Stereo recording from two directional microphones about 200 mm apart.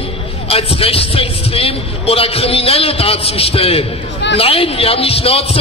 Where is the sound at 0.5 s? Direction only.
30° left (ahead or behind).